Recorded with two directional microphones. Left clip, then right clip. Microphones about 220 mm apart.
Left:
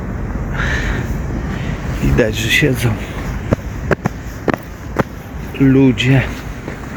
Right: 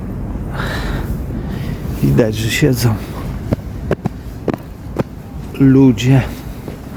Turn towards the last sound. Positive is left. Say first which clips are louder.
# even
turn(degrees=-20)  # may be behind; listen again after turning